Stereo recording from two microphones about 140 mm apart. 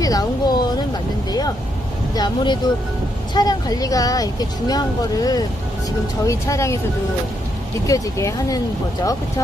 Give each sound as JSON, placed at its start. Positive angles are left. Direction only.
{"t": 0.0, "sound": "speech", "side_deg": 25}
{"t": 2.1, "sound": "speech", "side_deg": 30}
{"t": 7.8, "sound": "speech", "side_deg": 25}